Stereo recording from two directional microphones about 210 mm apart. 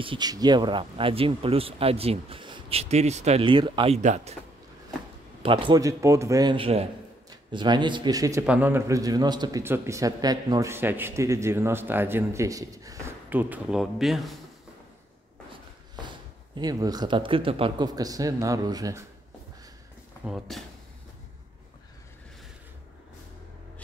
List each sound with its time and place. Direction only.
0.0 s speech: 20° right (ahead or behind)
5.4 s a man's voice: 25° right (ahead or behind); by 14.4 s centre (ahead or behind)
16.5 s speech: 20° right (ahead or behind)
20.2 s speech: centre (ahead or behind)